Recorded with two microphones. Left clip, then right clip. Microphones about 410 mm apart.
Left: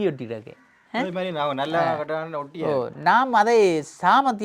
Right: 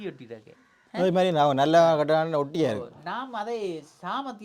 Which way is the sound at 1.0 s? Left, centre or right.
Right.